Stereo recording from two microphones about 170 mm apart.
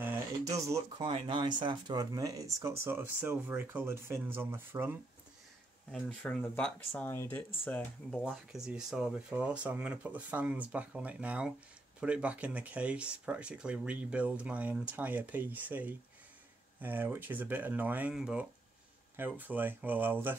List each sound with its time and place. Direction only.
0.0 s a sound: 15° right (ahead or behind)
0.9 s speech: 30° right (ahead or behind); by 4.9 s 15° right (ahead or behind)
5.9 s speech: 5° left (ahead or behind)